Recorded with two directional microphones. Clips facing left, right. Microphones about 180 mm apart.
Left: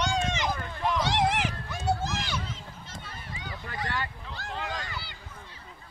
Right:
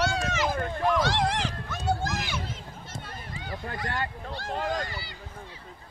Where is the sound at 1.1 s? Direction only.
20° left (ahead or behind).